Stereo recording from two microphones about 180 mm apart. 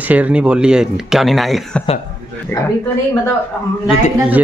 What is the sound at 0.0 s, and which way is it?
A man's voice, 10° right (ahead or behind).